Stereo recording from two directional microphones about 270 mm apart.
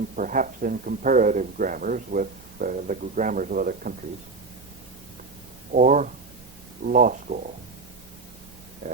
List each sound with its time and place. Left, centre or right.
0.2 s speech: right
5.7 s speech: right
8.8 s a sound: right